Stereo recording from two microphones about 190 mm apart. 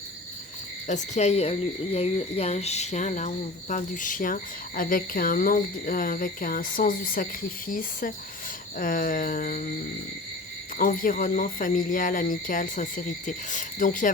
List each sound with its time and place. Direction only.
0.9 s a woman's voice: 40° left (ahead or behind)
10.8 s a woman's voice: 45° left (ahead or behind)